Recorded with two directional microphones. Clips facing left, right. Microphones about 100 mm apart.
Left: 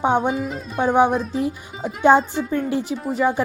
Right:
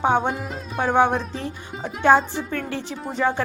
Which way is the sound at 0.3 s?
Centre (ahead or behind).